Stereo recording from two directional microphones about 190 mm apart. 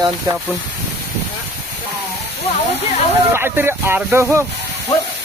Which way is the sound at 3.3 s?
10° right (ahead or behind).